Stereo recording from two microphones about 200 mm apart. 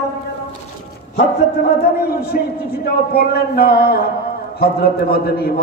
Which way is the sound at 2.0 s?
50° left (ahead or behind).